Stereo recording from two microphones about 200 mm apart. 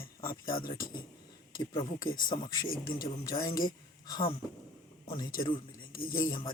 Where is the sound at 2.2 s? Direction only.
20° left (ahead or behind).